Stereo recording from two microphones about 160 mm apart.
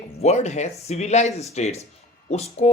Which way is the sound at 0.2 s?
45° left (ahead or behind).